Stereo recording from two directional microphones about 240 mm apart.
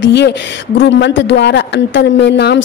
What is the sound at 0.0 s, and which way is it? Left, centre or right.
Speech, left.